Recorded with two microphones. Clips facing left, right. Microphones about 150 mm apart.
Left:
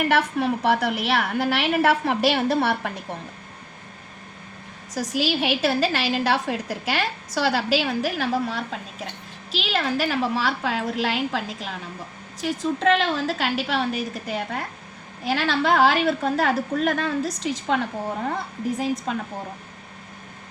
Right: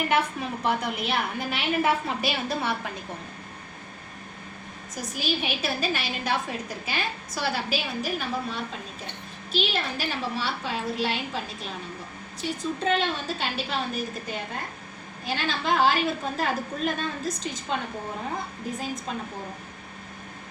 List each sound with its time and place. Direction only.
0.0 s a woman's voice: 75° left (ahead or behind)
4.9 s a woman's voice: 90° left